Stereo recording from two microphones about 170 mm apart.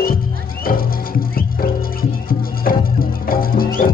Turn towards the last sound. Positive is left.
turn(degrees=60)  # may be behind; listen again after turning